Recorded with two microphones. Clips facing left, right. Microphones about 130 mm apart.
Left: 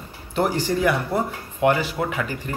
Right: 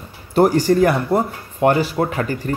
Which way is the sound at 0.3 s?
40° right (ahead or behind).